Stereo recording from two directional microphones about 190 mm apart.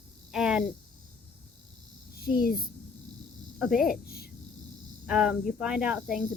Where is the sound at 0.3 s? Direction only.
5° right (ahead or behind).